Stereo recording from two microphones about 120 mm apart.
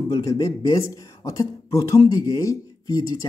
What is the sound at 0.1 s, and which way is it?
Speech, 30° left (ahead or behind).